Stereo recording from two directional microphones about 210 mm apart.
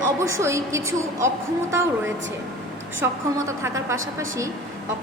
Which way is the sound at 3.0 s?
10° right (ahead or behind).